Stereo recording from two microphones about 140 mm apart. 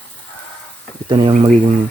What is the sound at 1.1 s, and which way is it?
Speech, 35° right (ahead or behind).